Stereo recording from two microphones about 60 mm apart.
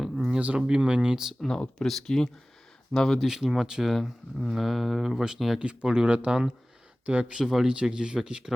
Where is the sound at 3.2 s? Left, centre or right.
Centre.